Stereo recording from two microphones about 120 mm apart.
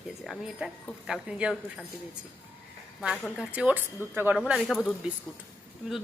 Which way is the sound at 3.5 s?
10° right (ahead or behind).